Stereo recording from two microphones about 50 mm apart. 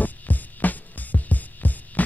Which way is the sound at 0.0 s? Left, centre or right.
Left.